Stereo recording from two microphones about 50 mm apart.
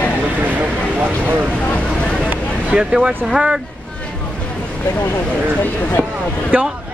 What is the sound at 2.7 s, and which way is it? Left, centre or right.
Speech, centre.